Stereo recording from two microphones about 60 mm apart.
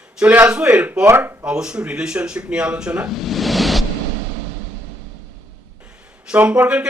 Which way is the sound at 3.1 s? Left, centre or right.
Centre.